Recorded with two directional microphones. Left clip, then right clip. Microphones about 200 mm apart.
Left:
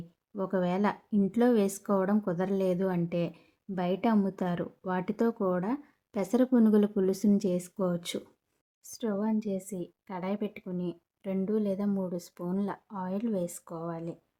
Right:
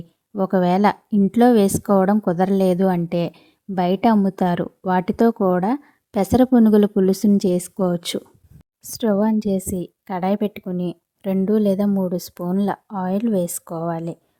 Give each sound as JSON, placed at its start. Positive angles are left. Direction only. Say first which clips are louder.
{"t": 0.3, "sound": "speech", "louder": "right 12 dB", "side_deg": -45}